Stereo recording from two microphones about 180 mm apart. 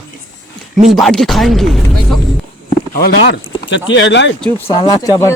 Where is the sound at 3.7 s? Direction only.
90° left.